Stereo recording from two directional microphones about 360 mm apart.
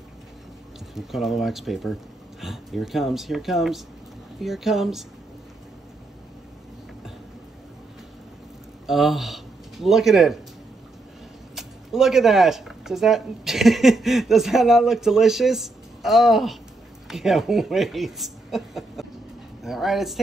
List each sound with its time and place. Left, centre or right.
0.9 s speech: centre
8.8 s a man's voice: centre
11.5 s speech: centre